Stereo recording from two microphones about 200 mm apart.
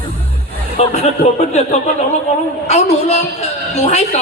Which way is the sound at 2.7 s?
35° left (ahead or behind).